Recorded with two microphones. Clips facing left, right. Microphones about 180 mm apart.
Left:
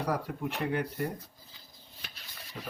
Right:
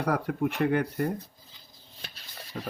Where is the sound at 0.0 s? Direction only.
60° right (ahead or behind).